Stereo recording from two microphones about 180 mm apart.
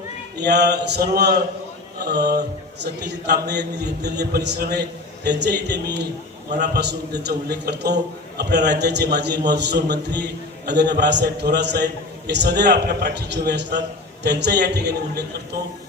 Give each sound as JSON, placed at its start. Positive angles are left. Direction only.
{"t": 0.3, "sound": "a man's voice", "side_deg": -65}
{"t": 2.8, "sound": "a man's voice", "side_deg": -65}